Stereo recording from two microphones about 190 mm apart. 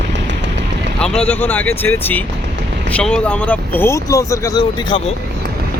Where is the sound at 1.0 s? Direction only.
5° left (ahead or behind); by 5.1 s 25° left (ahead or behind).